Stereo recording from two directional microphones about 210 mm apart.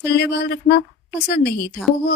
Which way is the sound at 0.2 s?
50° left (ahead or behind).